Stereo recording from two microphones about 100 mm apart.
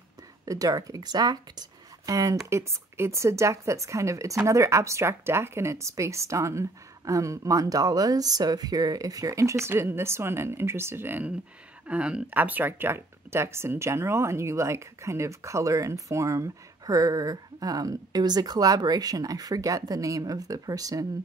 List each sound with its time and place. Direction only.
0.5 s speech: 35° right (ahead or behind)